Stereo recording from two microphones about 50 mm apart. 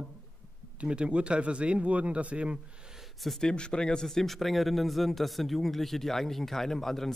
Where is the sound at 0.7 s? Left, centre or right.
Right.